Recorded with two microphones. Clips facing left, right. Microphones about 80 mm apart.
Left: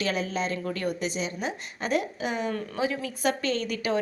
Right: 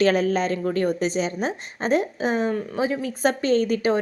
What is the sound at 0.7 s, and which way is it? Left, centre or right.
A woman's voice, right.